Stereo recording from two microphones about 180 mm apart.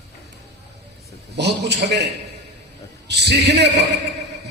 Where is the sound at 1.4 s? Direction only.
70° right (ahead or behind).